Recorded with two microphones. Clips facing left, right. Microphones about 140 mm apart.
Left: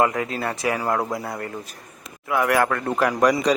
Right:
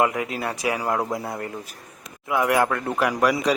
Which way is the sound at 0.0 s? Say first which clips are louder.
Left 1 dB; 15° right (ahead or behind).